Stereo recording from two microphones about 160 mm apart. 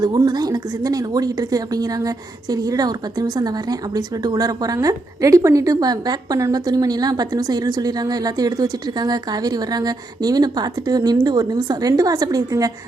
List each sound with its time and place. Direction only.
0.0 s a woman's voice: 25° right (ahead or behind)